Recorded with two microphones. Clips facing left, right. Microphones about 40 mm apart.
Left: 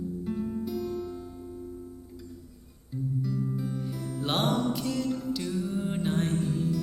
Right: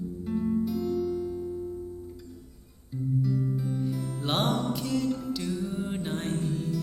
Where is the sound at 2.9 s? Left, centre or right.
Centre.